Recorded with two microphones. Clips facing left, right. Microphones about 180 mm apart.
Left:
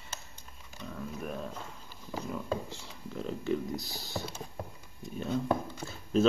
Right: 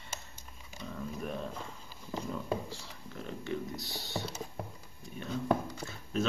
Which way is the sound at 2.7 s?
35° left (ahead or behind).